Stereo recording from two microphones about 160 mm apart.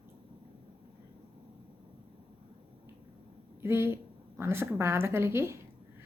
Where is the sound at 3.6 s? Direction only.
15° right (ahead or behind).